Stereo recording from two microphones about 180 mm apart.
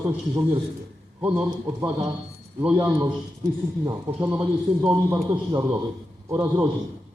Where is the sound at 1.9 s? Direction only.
30° right (ahead or behind).